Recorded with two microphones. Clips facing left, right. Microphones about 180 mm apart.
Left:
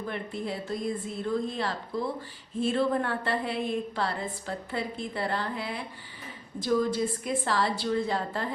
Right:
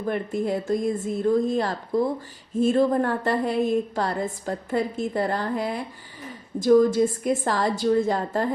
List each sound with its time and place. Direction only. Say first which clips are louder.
0.0 s a woman's voice: right 8 dB; 45° right (ahead or behind)